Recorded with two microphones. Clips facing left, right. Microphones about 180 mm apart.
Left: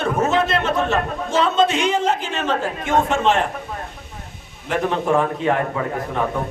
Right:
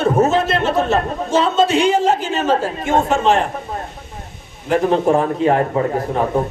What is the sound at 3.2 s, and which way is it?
Speech, centre (ahead or behind).